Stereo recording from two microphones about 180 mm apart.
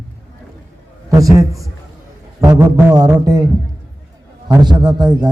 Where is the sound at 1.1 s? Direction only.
20° right (ahead or behind).